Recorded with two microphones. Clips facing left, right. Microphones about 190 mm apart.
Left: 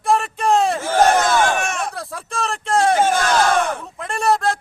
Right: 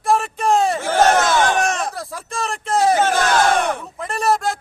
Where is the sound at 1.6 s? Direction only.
35° right (ahead or behind).